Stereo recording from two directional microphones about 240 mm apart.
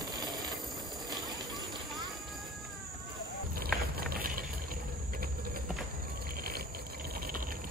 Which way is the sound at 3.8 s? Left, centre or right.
Right.